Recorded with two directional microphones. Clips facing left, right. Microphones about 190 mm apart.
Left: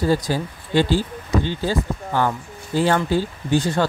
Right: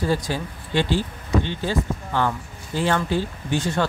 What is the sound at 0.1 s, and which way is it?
Speech, 40° left (ahead or behind).